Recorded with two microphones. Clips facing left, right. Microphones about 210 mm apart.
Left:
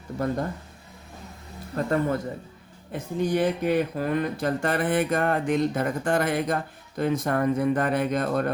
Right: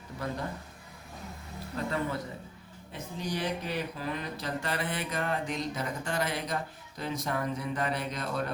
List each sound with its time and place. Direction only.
1.7 s speech: 50° left (ahead or behind)